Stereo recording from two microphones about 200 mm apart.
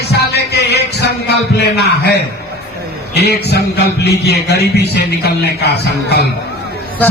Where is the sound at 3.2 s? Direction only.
55° left (ahead or behind).